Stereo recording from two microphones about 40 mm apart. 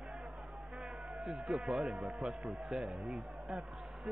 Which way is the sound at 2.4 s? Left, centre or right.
Centre.